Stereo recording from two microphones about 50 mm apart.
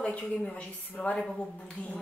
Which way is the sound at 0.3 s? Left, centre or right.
Left.